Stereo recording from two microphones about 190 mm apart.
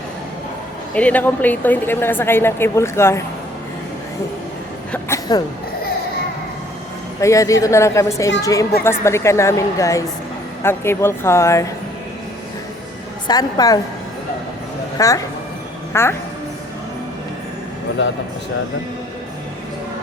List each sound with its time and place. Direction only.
0.9 s a woman's voice: 5° left (ahead or behind)
4.9 s a sound: 15° left (ahead or behind)
7.2 s a woman's voice: 15° left (ahead or behind)
13.2 s a woman's voice: 20° left (ahead or behind)
14.9 s a woman's voice: 20° left (ahead or behind)